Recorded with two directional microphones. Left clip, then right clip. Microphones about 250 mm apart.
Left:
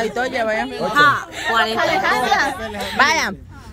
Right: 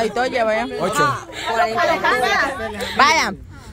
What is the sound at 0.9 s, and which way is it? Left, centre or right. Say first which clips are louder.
Speech: left 6 dB; left.